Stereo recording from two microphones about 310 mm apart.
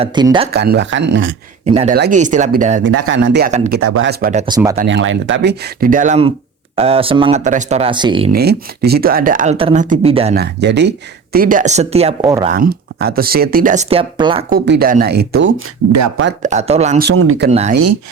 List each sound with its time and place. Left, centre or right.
0.0 s speech: centre
0.5 s speech: right
1.6 s speech: right
2.8 s speech: right
3.8 s speech: right
4.4 s speech: centre
4.8 s speech: right; by 8.3 s centre
8.3 s speech: right
10.3 s speech: right; by 14.4 s centre
14.5 s speech: right
16.4 s speech: right
17.1 s speech: right
17.5 s speech: right